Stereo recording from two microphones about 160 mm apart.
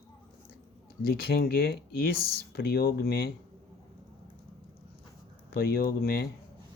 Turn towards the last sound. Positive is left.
turn(degrees=70)  # may be behind; listen again after turning